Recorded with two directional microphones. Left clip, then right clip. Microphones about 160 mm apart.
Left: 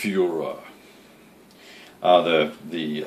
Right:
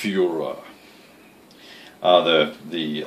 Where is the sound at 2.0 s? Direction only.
Centre (ahead or behind).